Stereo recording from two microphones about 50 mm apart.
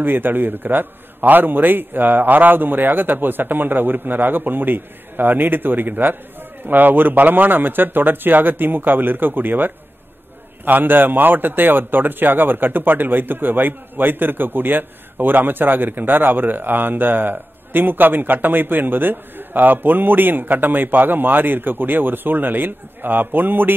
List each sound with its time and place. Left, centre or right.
0.0 s a man's voice: right